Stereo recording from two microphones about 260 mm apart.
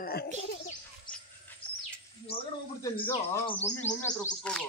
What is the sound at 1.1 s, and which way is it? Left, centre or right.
Dog, centre.